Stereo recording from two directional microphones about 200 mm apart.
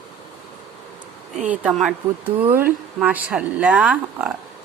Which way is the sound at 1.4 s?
Centre (ahead or behind).